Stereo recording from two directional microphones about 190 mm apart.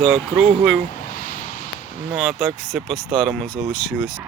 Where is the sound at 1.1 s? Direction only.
45° left (ahead or behind).